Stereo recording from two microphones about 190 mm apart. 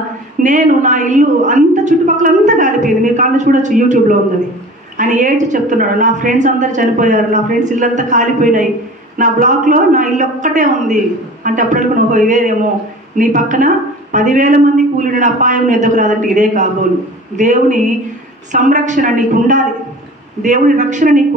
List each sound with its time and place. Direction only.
0.4 s a woman's voice: 40° right (ahead or behind)